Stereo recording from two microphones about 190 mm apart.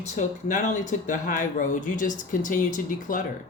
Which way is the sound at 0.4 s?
40° left (ahead or behind).